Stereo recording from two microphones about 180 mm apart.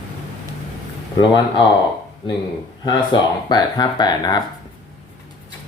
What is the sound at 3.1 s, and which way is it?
Speech, 25° left (ahead or behind).